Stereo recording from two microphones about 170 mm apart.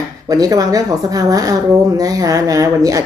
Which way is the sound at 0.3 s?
20° right (ahead or behind).